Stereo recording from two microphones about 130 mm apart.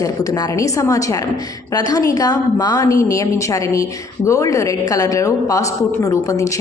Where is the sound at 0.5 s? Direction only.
25° left (ahead or behind).